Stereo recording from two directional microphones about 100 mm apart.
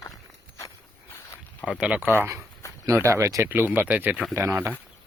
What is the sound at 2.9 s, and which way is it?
Speech, 30° right (ahead or behind).